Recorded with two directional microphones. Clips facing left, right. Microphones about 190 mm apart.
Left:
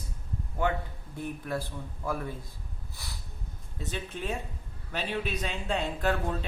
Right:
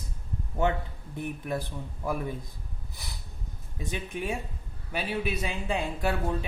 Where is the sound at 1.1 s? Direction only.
15° right (ahead or behind).